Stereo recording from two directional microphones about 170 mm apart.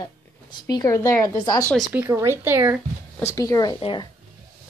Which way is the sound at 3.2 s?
20° left (ahead or behind).